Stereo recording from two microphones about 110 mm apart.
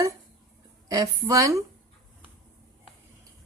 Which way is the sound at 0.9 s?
30° right (ahead or behind).